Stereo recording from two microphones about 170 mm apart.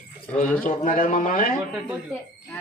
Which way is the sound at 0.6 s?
50° left (ahead or behind).